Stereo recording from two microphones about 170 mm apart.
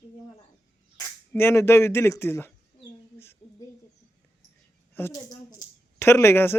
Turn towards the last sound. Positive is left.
turn(degrees=15)  # may be behind; listen again after turning